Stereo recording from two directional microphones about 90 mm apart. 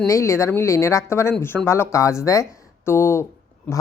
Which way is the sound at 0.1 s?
35° left (ahead or behind).